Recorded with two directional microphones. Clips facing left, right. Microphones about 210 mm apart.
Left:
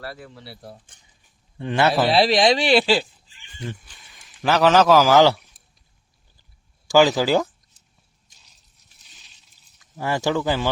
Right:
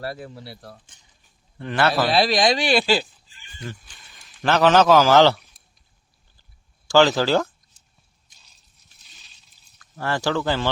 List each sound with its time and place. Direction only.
0.0 s speech: 25° right (ahead or behind)
0.4 s speech: 5° left (ahead or behind)
3.8 s a man's voice: centre (ahead or behind)
6.8 s speech: 10° left (ahead or behind)
9.7 s speech: 15° left (ahead or behind)